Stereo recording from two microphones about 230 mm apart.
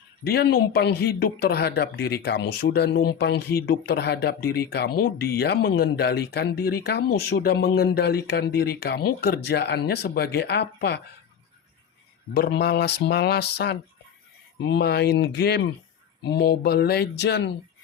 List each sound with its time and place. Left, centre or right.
0.3 s speech: left
12.3 s speech: left